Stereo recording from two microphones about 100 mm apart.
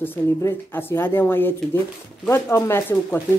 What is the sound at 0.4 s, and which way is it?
Speech, 25° left (ahead or behind).